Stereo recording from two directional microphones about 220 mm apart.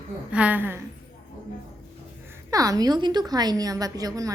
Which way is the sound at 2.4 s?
15° right (ahead or behind).